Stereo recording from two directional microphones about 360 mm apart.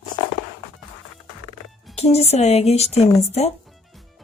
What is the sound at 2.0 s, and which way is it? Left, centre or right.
A woman's voice, centre.